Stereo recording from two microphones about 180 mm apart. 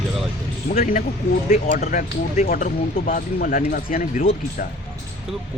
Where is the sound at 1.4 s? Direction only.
45° left (ahead or behind).